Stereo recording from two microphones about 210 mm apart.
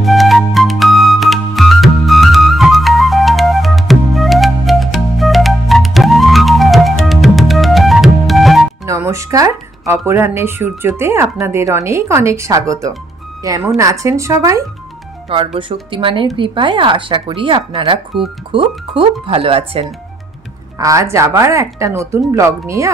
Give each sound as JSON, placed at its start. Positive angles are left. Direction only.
{"t": 0.0, "sound": "music", "side_deg": 0}
{"t": 8.8, "sound": "speech", "side_deg": -15}
{"t": 15.2, "sound": "speech", "side_deg": -25}
{"t": 20.8, "sound": "speech", "side_deg": -15}